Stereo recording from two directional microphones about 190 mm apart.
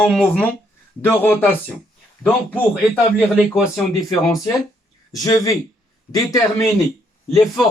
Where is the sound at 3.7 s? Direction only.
15° left (ahead or behind).